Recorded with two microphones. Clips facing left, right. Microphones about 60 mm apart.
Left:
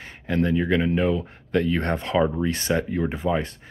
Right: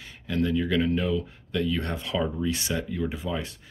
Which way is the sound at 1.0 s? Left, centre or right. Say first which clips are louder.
Left 4 dB; left.